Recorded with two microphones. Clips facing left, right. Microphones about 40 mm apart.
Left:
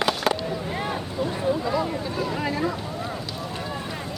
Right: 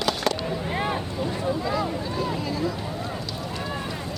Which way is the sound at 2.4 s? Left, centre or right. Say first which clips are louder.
Left 2 dB; left.